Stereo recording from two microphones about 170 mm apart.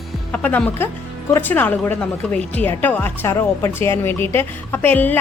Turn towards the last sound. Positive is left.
turn(degrees=10)  # may be behind; listen again after turning